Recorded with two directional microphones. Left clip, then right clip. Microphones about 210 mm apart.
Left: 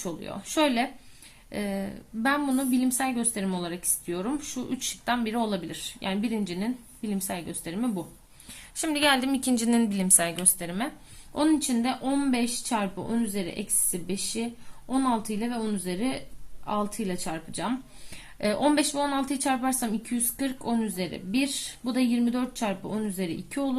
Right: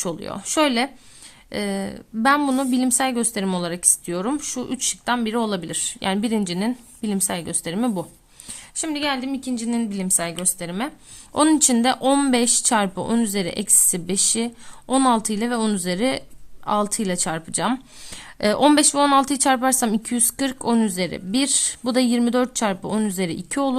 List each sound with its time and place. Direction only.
0.0 s a woman's voice: 35° right (ahead or behind)
8.7 s a woman's voice: 15° right (ahead or behind)
11.3 s a woman's voice: 45° right (ahead or behind)